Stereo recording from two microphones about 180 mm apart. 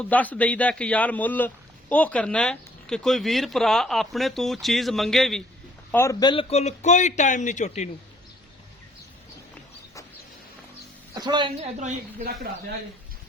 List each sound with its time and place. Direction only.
0.0 s speech: 10° left (ahead or behind)
5.9 s speech: 15° left (ahead or behind)
6.5 s speech: 40° left (ahead or behind)
11.1 s a woman's voice: 25° right (ahead or behind)
11.8 s a woman's voice: 40° right (ahead or behind)